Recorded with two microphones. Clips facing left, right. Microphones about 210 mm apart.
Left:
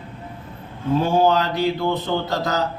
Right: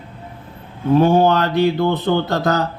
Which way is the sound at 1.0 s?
60° right (ahead or behind).